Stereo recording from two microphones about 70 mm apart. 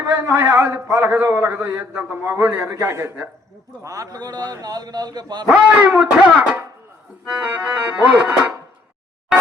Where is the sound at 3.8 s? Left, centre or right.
Right.